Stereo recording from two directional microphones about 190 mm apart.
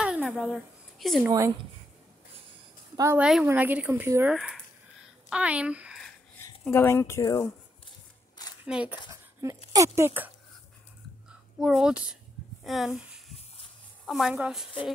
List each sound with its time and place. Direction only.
0.0 s a sound: centre (ahead or behind)
1.2 s speech: 15° right (ahead or behind)
3.0 s speech: 15° right (ahead or behind)
6.7 s speech: 15° left (ahead or behind)
8.6 s speech: 5° right (ahead or behind)
9.1 s a sound: 15° right (ahead or behind)
9.7 s speech: 15° right (ahead or behind)
11.6 s a woman's voice: centre (ahead or behind)
12.6 s a sound: centre (ahead or behind)
14.0 s a woman's voice: centre (ahead or behind)